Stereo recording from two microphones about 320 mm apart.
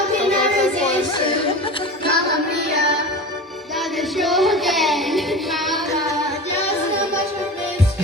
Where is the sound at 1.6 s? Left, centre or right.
Centre.